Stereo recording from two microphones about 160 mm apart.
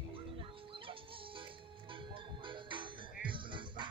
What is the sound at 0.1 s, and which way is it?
Music, 35° right (ahead or behind).